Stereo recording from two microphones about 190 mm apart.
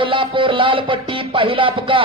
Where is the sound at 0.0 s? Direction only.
25° right (ahead or behind).